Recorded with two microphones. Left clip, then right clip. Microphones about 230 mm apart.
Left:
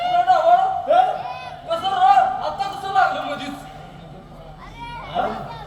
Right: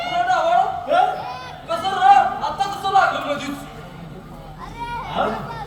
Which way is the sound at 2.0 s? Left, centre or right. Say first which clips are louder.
Right 2 dB; right.